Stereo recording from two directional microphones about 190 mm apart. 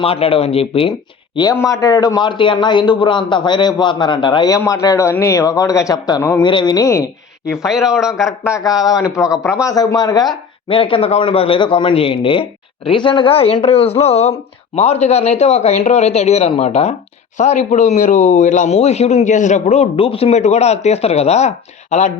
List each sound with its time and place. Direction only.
0.0 s a man's voice: 30° left (ahead or behind)
1.4 s a man's voice: 20° left (ahead or behind)
7.6 s speech: centre (ahead or behind)
8.4 s a man's voice: 20° left (ahead or behind); by 22.1 s 35° left (ahead or behind)